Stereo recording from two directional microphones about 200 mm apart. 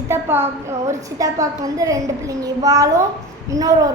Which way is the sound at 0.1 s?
10° right (ahead or behind).